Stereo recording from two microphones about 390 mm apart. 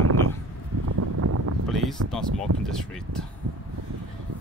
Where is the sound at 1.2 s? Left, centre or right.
Right.